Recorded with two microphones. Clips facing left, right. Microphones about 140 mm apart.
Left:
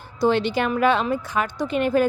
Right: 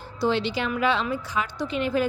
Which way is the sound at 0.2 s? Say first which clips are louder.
Left 4 dB; 50° left (ahead or behind).